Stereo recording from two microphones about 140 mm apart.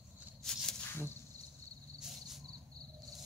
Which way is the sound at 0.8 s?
15° left (ahead or behind).